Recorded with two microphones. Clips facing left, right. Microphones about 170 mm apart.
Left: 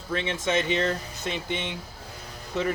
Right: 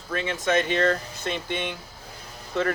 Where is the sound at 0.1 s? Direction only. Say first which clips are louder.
Right 2 dB; 25° left (ahead or behind).